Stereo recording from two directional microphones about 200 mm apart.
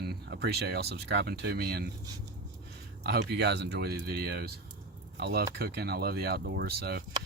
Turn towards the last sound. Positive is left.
turn(degrees=-55)  # may be behind; listen again after turning